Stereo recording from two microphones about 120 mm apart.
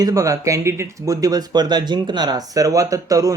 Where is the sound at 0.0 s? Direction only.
30° right (ahead or behind).